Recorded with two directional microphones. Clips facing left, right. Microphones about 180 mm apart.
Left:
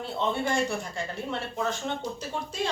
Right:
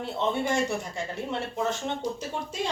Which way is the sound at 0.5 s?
20° right (ahead or behind).